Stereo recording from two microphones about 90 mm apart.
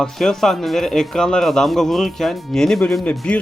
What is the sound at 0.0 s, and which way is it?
Speech, 5° left (ahead or behind).